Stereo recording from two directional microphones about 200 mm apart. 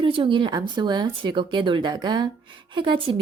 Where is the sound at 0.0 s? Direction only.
25° right (ahead or behind).